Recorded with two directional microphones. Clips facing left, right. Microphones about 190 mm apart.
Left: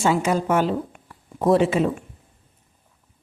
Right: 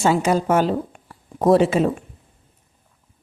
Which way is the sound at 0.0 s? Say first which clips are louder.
Right 2 dB; 40° right (ahead or behind).